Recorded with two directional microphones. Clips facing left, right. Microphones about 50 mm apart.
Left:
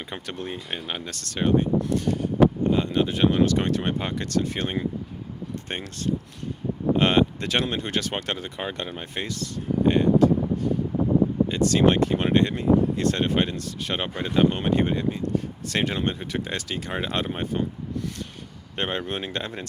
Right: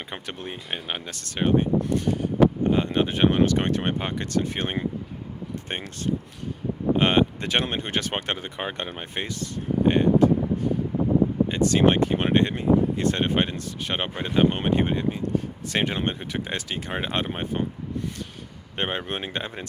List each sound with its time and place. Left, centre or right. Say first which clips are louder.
0.1 s speech: left 3 dB; centre
2.6 s speech: even; right
11.4 s speech: even; right
18.8 s speech: even; centre